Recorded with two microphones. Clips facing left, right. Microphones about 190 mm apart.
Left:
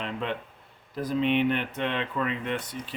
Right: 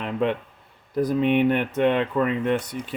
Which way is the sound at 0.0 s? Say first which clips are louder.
Right 7 dB; 50° right (ahead or behind).